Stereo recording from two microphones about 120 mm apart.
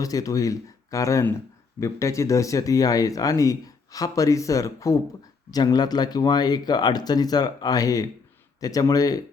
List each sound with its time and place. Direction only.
0.0 s speech: 30° left (ahead or behind)